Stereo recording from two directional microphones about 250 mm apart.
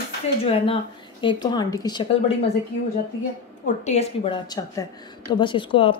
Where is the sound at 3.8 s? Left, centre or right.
Left.